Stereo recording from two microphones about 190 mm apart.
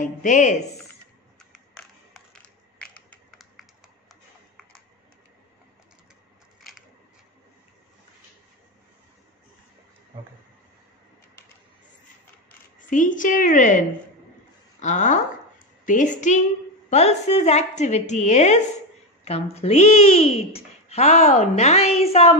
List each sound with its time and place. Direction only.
0.0 s speech: 40° left (ahead or behind)
1.4 s a sound: 5° left (ahead or behind)
2.8 s computer keyboard: 5° left (ahead or behind)
12.7 s a woman's voice: 45° left (ahead or behind)